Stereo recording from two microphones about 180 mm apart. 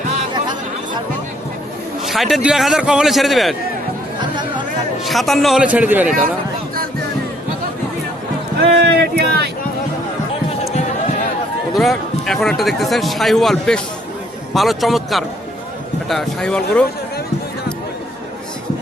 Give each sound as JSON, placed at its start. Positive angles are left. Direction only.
{"t": 2.0, "sound": "speech", "side_deg": 0}
{"t": 4.2, "sound": "chatter", "side_deg": -25}
{"t": 5.0, "sound": "speech", "side_deg": 0}
{"t": 8.8, "sound": "speech", "side_deg": -65}
{"t": 11.7, "sound": "a man's voice", "side_deg": 0}